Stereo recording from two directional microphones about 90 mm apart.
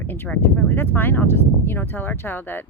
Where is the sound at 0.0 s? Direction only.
20° left (ahead or behind).